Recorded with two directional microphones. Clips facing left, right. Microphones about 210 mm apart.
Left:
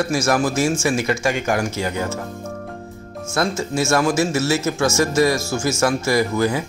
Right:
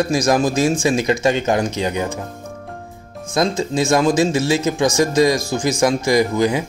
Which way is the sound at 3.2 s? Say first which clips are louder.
Right 3 dB; 15° right (ahead or behind).